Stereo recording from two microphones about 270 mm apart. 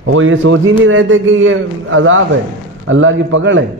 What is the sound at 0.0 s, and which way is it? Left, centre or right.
A man's voice, right.